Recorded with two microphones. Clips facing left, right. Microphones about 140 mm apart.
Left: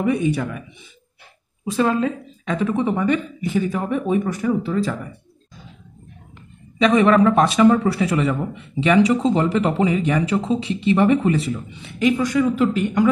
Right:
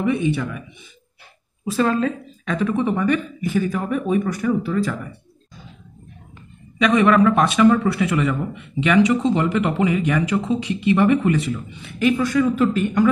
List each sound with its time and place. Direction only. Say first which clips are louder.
0.0 s speech: left 1 dB; 40° left (ahead or behind)
1.6 s speech: even; 20° left (ahead or behind)
6.8 s speech: left 1 dB; 30° left (ahead or behind)